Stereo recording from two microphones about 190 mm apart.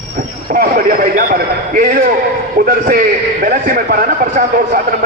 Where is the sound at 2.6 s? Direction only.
50° right (ahead or behind).